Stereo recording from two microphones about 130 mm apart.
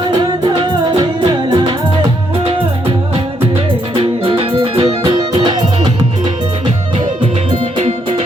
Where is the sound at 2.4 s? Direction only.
45° right (ahead or behind).